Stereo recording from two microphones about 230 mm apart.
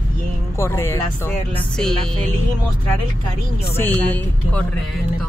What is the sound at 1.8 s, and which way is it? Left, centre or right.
Music, centre.